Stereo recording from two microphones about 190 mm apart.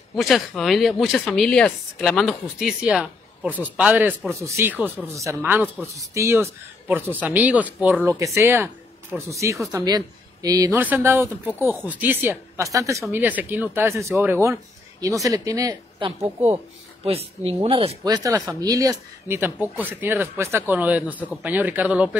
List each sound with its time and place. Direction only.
0.1 s speech: centre (ahead or behind); by 16.5 s 15° right (ahead or behind)
17.0 s speech: 30° right (ahead or behind); by 22.1 s 5° right (ahead or behind)